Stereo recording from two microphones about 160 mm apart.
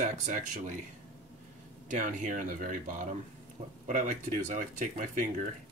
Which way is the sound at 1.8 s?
50° right (ahead or behind).